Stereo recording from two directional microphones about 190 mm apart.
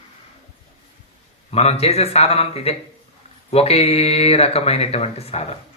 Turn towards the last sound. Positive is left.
turn(degrees=30)  # may be behind; listen again after turning